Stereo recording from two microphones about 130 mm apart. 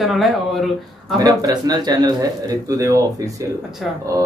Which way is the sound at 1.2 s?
30° right (ahead or behind).